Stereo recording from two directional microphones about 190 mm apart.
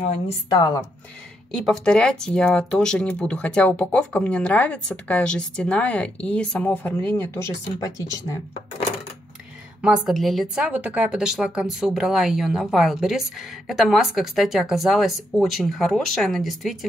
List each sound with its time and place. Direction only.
0.5 s speech: 25° left (ahead or behind)
1.5 s speech: 5° left (ahead or behind)
9.8 s a woman's voice: centre (ahead or behind)